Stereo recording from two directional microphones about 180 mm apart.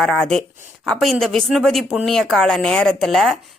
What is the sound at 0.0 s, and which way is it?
Speech, 5° left (ahead or behind).